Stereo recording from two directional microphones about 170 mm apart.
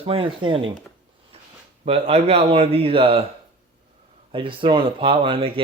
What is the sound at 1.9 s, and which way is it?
Speech, 35° right (ahead or behind).